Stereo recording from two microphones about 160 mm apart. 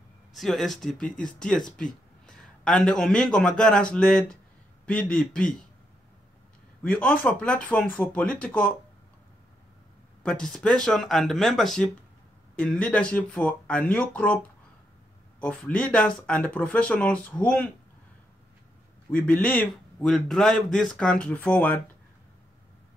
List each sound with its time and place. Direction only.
0.4 s a man's voice: centre (ahead or behind)
6.8 s speech: 10° left (ahead or behind)
10.2 s a man's voice: 5° left (ahead or behind)
15.4 s speech: 5° left (ahead or behind)
19.1 s a man's voice: 10° left (ahead or behind)